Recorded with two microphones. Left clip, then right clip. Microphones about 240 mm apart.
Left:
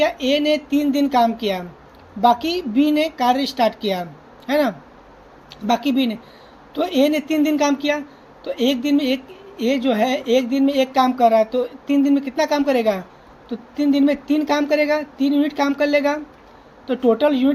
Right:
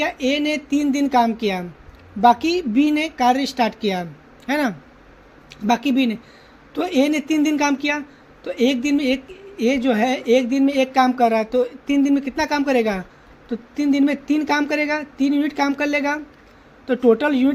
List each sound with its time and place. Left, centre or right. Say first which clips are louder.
0.0 s speech: left 3 dB; right